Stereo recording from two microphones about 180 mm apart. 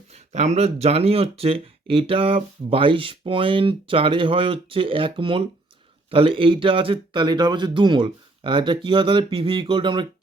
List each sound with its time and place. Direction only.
0.3 s speech: 35° right (ahead or behind)